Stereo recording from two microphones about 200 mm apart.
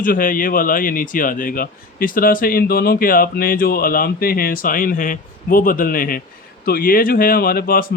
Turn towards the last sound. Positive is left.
turn(degrees=50)  # may be behind; listen again after turning